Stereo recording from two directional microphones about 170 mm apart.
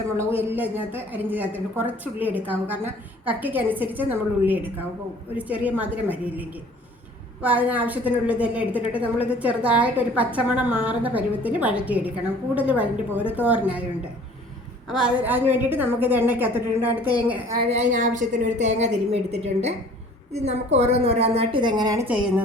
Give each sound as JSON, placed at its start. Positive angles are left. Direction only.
{"t": 0.2, "sound": "a woman's voice", "side_deg": -15}
{"t": 17.6, "sound": "a woman's voice", "side_deg": -40}
{"t": 22.0, "sound": "a woman's voice", "side_deg": -5}